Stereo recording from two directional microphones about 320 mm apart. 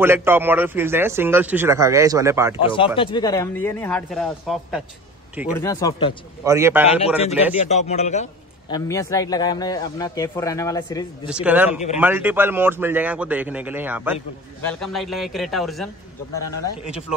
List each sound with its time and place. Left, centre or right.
0.0 s a man's voice: centre
2.6 s a man's voice: centre
6.4 s a man's voice: centre
7.6 s a man's voice: left
11.2 s a man's voice: centre